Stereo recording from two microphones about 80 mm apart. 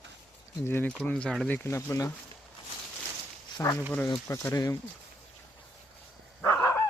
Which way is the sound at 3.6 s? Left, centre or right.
Left.